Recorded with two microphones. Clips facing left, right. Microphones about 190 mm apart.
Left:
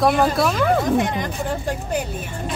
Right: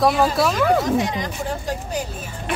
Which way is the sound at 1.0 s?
55° left (ahead or behind).